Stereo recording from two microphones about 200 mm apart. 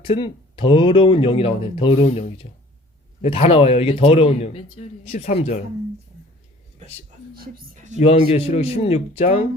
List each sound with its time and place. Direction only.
0.0 s speech: 25° left (ahead or behind)
7.3 s speech: 50° right (ahead or behind)
7.9 s speech: 30° left (ahead or behind)